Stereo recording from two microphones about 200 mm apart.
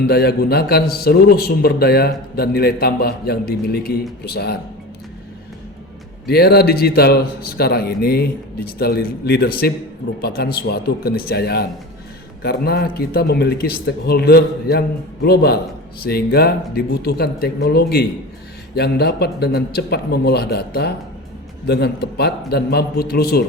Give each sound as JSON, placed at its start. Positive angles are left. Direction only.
{"t": 0.1, "sound": "a man's voice", "side_deg": 55}
{"t": 6.2, "sound": "a man's voice", "side_deg": 55}